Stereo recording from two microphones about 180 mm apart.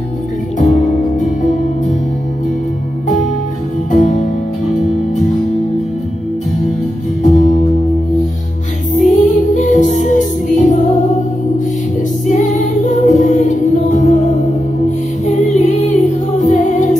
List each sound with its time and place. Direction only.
1.2 s music: 40° left (ahead or behind)
3.9 s music: 40° left (ahead or behind)
7.2 s music: 45° left (ahead or behind)
9.0 s music: 45° left (ahead or behind)
12.3 s music: 40° left (ahead or behind)